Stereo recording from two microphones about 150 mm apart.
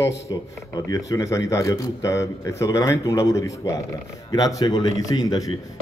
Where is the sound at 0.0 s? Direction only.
25° left (ahead or behind).